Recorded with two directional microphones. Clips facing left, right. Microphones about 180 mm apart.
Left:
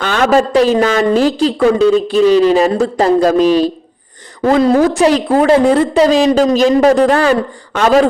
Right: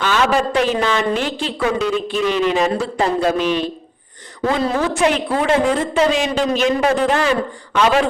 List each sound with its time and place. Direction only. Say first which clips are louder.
0.0 s a man's voice: left 5 dB; 50° left (ahead or behind)